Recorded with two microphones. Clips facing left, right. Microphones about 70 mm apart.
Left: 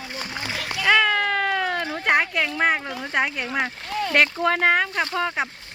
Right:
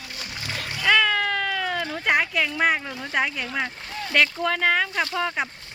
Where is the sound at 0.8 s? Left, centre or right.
Centre.